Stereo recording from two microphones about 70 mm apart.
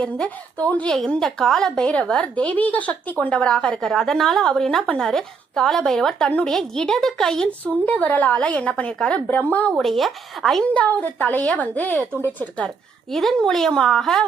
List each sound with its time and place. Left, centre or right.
0.0 s a woman's voice: centre
0.9 s a woman's voice: centre
7.6 s a woman's voice: left
9.7 s speech: centre
10.6 s speech: left
12.6 s a woman's voice: centre